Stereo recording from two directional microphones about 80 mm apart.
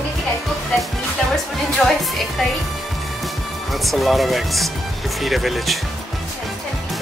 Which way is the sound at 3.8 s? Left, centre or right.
Centre.